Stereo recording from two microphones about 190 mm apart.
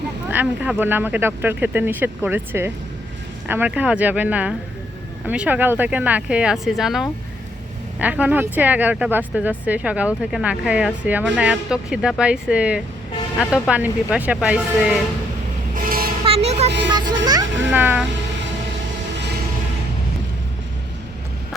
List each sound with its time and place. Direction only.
0.3 s speech: 10° right (ahead or behind)
15.7 s vehicle: 50° right (ahead or behind)
16.2 s a sound: 30° right (ahead or behind)
17.7 s speech: 10° right (ahead or behind)